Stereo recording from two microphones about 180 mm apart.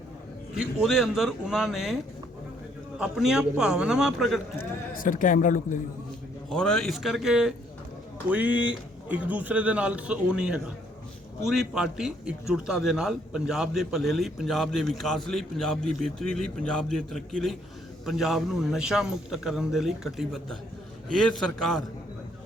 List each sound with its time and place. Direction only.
0.5 s a man's voice: 5° right (ahead or behind)
3.0 s a man's voice: 5° right (ahead or behind)
4.5 s speech: 50° left (ahead or behind)
6.5 s a man's voice: 5° left (ahead or behind)